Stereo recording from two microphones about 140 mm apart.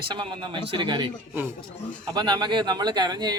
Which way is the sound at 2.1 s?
30° right (ahead or behind).